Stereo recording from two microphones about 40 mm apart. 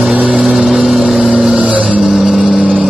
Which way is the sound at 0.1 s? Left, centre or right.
Right.